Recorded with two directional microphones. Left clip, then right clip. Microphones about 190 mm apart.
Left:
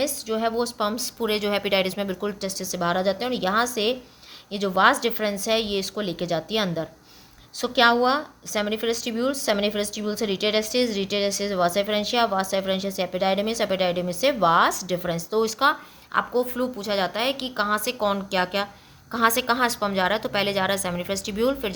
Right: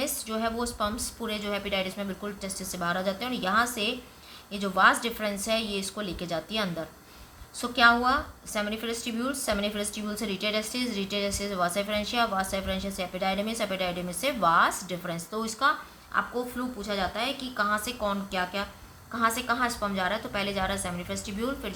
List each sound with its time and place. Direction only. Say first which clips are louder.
0.0 s a woman's voice: left 6 dB; 35° left (ahead or behind); by 21.7 s 55° left (ahead or behind)